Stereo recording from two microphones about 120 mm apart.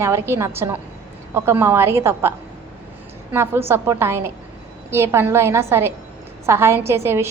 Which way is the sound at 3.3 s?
20° right (ahead or behind).